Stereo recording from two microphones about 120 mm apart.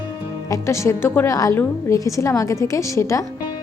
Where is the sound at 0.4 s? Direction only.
25° left (ahead or behind).